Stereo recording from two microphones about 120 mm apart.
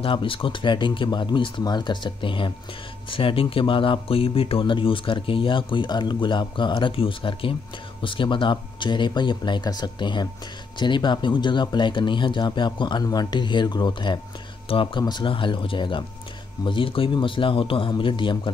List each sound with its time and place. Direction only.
0.0 s speech: 45° left (ahead or behind)